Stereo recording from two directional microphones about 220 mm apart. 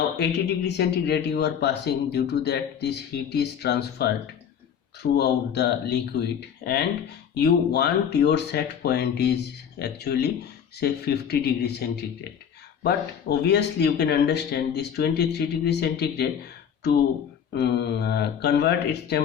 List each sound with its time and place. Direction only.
0.2 s speech: 50° left (ahead or behind)
5.1 s speech: 50° left (ahead or behind)
12.8 s speech: 50° left (ahead or behind)
17.5 s speech: 50° left (ahead or behind)